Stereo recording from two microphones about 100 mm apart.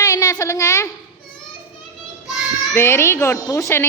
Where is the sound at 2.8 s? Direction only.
25° left (ahead or behind).